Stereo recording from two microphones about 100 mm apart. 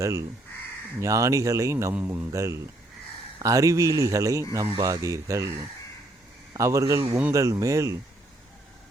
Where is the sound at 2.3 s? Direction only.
30° right (ahead or behind).